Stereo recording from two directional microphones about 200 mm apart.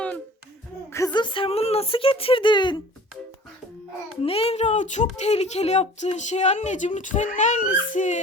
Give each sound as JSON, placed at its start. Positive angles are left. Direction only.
{"t": 0.9, "sound": "speech", "side_deg": 15}
{"t": 4.2, "sound": "speech", "side_deg": 30}